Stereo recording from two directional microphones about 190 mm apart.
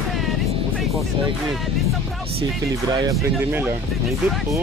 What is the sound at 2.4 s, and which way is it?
Speech, 20° right (ahead or behind).